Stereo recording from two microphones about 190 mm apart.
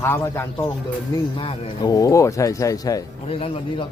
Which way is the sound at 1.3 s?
25° left (ahead or behind).